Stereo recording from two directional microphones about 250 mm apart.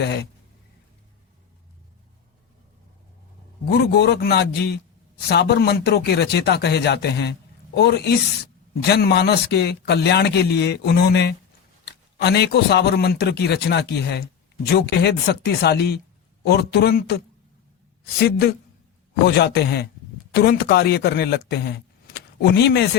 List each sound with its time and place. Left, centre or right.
0.0 s a man's voice: left
3.7 s a man's voice: left